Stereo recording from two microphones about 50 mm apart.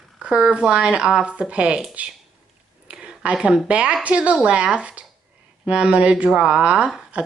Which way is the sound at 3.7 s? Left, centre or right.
Right.